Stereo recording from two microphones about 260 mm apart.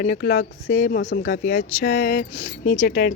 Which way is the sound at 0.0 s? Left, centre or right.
Left.